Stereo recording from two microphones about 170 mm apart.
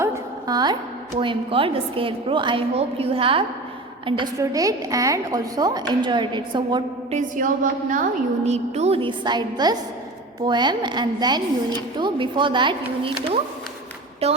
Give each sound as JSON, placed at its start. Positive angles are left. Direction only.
{"t": 0.0, "sound": "a sound", "side_deg": -20}
{"t": 1.2, "sound": "a woman's voice", "side_deg": -30}
{"t": 7.1, "sound": "a woman's voice", "side_deg": -50}
{"t": 8.4, "sound": "a woman's voice", "side_deg": -40}